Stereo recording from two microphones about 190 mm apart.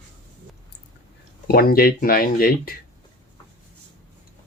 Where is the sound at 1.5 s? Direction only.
50° left (ahead or behind).